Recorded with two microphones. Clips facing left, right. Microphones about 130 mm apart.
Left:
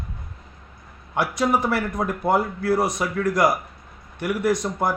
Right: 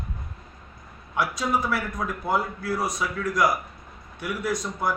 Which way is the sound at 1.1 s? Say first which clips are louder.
Left 4 dB; 70° left (ahead or behind).